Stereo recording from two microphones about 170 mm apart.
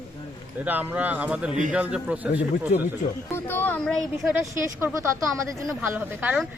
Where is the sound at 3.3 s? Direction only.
10° left (ahead or behind).